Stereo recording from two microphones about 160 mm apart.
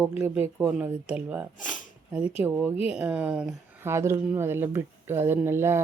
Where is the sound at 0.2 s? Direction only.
10° right (ahead or behind).